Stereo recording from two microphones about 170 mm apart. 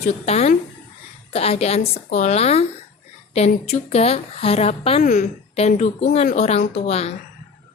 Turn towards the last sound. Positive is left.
turn(degrees=40)  # may be behind; listen again after turning